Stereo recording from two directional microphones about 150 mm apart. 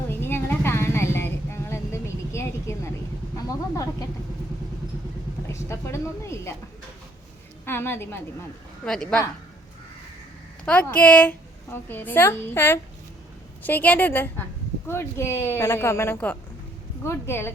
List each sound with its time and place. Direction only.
0.1 s vehicle: 15° left (ahead or behind)
5.5 s a woman's voice: 20° left (ahead or behind)
7.6 s a woman's voice: 15° left (ahead or behind)
10.8 s a child's voice: 10° left (ahead or behind)